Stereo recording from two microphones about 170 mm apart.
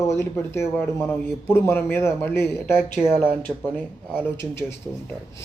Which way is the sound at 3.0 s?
Centre (ahead or behind).